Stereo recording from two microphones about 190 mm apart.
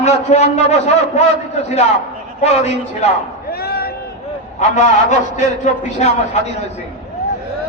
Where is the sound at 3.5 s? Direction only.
55° left (ahead or behind).